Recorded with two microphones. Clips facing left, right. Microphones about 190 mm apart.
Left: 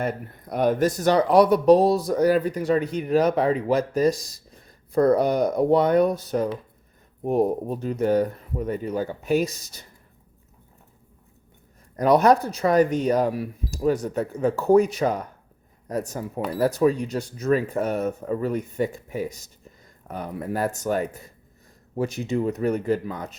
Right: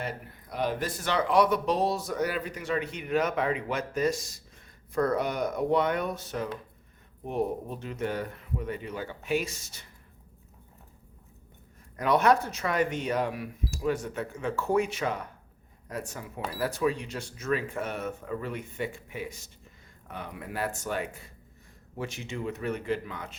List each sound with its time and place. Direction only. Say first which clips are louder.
0.0 s speech: left 8 dB; 50° left (ahead or behind)
11.9 s speech: left 6 dB; 40° left (ahead or behind)